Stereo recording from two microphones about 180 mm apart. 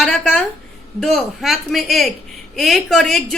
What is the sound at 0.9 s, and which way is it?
A woman's voice, centre (ahead or behind).